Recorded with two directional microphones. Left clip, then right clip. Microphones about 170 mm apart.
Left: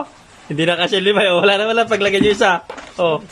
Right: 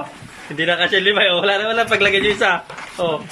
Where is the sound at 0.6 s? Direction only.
15° left (ahead or behind).